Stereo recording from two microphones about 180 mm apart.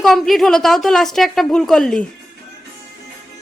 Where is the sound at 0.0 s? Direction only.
Centre (ahead or behind).